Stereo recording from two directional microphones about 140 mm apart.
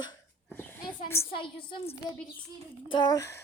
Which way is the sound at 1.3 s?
40° left (ahead or behind).